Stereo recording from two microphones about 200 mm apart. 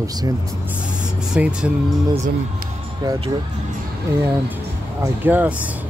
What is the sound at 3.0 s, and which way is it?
Speech, 20° right (ahead or behind).